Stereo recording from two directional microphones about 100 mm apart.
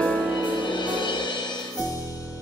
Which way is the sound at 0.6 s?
50° left (ahead or behind).